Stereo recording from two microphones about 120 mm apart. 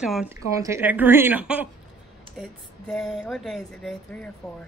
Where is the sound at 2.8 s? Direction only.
5° left (ahead or behind).